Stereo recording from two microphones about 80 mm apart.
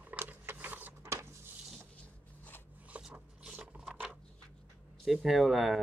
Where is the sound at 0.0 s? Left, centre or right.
Right.